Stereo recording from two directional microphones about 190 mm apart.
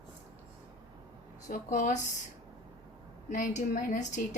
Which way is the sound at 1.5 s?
40° left (ahead or behind).